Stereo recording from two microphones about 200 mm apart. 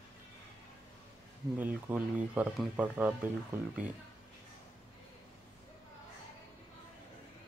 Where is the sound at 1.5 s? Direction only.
5° right (ahead or behind).